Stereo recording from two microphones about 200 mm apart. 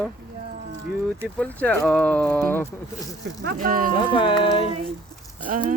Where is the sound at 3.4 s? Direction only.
50° right (ahead or behind).